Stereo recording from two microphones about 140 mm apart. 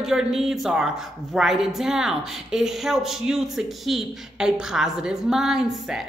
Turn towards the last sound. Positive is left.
turn(degrees=-5)  # may be behind; listen again after turning